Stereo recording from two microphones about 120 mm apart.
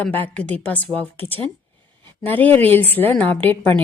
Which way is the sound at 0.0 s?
10° left (ahead or behind).